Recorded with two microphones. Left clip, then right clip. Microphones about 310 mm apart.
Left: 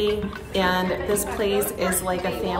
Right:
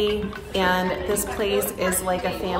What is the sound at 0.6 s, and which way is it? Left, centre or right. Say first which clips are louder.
A child's voice: even; centre.